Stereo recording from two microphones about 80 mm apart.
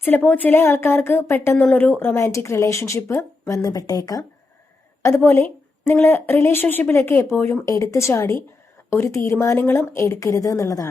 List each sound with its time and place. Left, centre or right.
0.0 s speech: left
3.6 s speech: left
5.0 s speech: left
7.6 s speech: left